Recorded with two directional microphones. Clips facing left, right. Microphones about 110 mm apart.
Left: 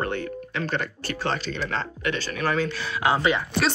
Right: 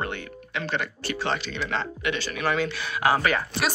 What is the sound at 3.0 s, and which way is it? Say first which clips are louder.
Speech: even; 20° left (ahead or behind).